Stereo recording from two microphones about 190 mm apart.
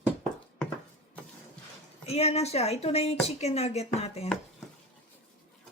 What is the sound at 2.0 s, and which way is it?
A woman's voice, 35° left (ahead or behind).